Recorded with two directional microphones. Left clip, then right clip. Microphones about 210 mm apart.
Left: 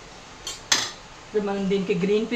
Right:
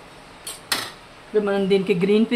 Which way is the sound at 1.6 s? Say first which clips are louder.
Right 4 dB; 35° right (ahead or behind).